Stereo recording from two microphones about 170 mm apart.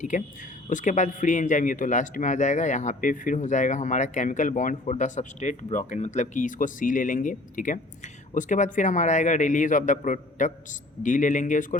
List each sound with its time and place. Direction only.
0.1 s speech: 45° left (ahead or behind)